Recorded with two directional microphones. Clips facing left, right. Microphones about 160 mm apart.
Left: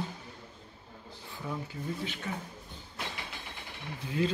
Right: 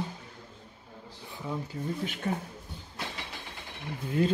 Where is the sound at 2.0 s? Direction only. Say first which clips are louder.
Right 4 dB; 50° right (ahead or behind).